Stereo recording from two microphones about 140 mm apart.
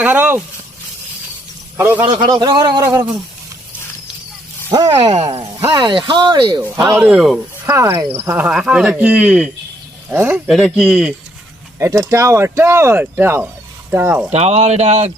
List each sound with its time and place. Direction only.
0.0 s speech: 15° right (ahead or behind)
1.7 s a man's voice: 15° right (ahead or behind)
2.1 s a man's voice: 30° right (ahead or behind)
4.7 s speech: 30° right (ahead or behind)
4.9 s speech: 45° right (ahead or behind)
5.5 s speech: 20° right (ahead or behind)
5.8 s a man's voice: 35° right (ahead or behind)
7.1 s speech: centre (ahead or behind)
7.7 s speech: 15° right (ahead or behind)
10.5 s speech: centre (ahead or behind)
11.8 s speech: 25° right (ahead or behind)
14.3 s speech: 50° right (ahead or behind)